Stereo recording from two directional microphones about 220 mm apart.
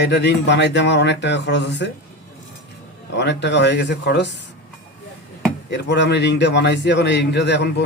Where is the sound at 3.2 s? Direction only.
50° left (ahead or behind).